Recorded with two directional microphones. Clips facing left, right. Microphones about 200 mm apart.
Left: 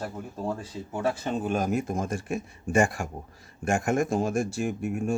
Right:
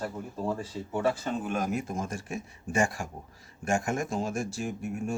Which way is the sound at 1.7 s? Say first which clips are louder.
Left 4 dB; 50° left (ahead or behind).